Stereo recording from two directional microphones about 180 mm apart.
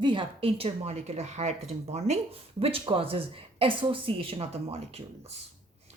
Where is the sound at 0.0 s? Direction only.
30° right (ahead or behind).